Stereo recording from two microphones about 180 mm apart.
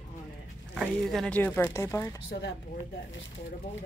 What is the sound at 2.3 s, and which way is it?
Speech, 65° left (ahead or behind).